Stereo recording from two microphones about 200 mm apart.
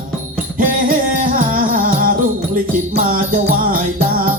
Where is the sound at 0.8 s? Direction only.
45° right (ahead or behind).